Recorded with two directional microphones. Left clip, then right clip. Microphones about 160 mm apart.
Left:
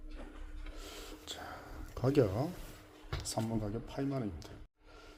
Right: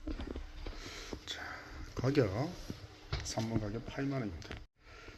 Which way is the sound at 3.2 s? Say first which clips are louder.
Left 1 dB; 10° left (ahead or behind).